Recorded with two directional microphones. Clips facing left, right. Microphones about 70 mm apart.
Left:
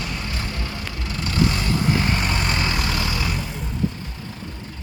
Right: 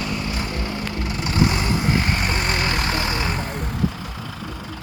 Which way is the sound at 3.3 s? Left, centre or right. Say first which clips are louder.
Right 3 dB; right.